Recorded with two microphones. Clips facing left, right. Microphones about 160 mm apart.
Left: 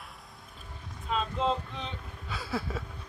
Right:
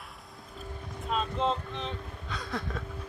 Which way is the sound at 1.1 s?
Centre (ahead or behind).